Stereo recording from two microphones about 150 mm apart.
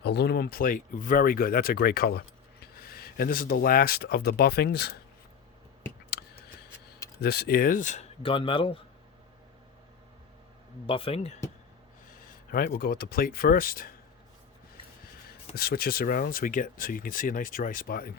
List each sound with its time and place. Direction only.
0.0 s speech: 90° left
7.2 s speech: 90° left; by 8.0 s 55° left (ahead or behind)
8.2 s speech: 35° left (ahead or behind)
10.8 s speech: 35° left (ahead or behind)
12.5 s speech: 80° left
15.3 s speech: 90° left